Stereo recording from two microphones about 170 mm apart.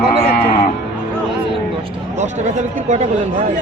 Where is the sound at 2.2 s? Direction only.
45° right (ahead or behind).